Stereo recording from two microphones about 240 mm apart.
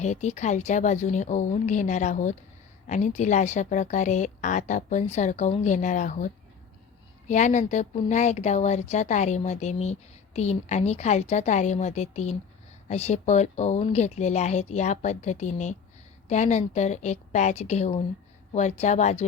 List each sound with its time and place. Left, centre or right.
0.0 s a woman's voice: left